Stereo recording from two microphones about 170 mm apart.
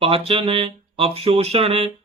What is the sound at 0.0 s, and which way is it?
Speech, 35° right (ahead or behind).